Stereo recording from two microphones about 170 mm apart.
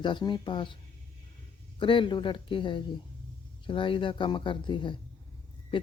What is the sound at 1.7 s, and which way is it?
Speech, 30° left (ahead or behind).